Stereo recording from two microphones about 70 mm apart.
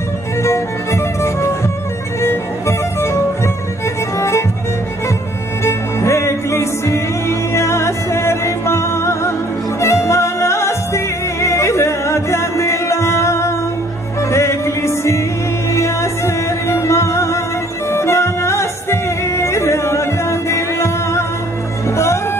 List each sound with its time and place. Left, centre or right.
0.4 s music: left
4.2 s music: left
5.6 s music: left